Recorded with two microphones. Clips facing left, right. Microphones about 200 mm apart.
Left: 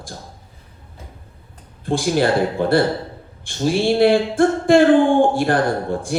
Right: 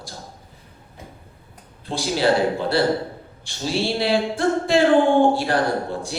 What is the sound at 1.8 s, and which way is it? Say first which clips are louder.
A woman's voice: left 3 dB; 50° left (ahead or behind).